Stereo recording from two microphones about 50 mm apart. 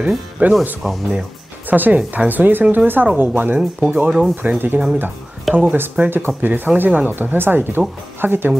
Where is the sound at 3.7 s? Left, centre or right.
Right.